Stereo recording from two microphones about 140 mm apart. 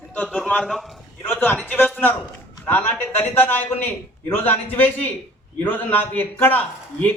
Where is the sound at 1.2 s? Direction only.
15° left (ahead or behind).